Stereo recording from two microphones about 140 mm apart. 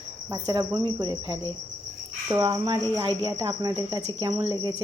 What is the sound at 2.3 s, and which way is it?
Cricket, 25° right (ahead or behind).